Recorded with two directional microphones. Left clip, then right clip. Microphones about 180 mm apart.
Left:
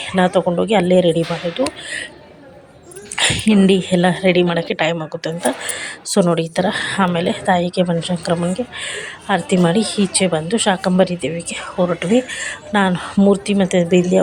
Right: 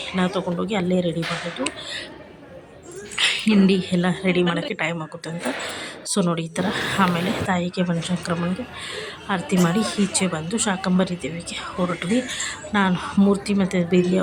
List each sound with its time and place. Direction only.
0.0 s speech: 20° left (ahead or behind)
3.2 s a woman's voice: 20° left (ahead or behind)